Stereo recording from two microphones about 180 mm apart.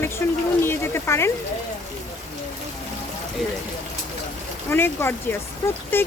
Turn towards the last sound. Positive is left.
turn(degrees=10)  # may be behind; listen again after turning